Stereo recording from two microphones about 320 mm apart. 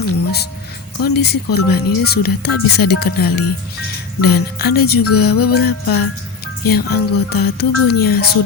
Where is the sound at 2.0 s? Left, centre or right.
Left.